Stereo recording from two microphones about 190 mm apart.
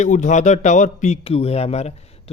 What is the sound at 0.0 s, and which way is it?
A man's voice, 40° left (ahead or behind).